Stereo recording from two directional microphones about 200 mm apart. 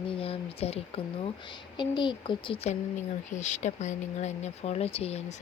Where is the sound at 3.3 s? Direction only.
35° left (ahead or behind).